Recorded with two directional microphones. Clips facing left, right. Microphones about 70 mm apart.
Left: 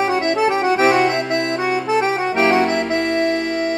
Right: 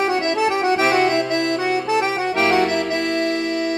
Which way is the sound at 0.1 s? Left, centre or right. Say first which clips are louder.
Left 2 dB; left.